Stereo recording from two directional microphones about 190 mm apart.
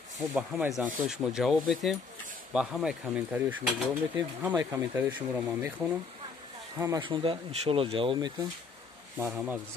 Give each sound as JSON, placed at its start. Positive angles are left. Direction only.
{"t": 0.2, "sound": "speech", "side_deg": -5}
{"t": 6.8, "sound": "speech", "side_deg": -20}
{"t": 9.2, "sound": "speech", "side_deg": -10}